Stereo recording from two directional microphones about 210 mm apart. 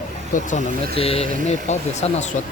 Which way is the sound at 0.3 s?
30° left (ahead or behind).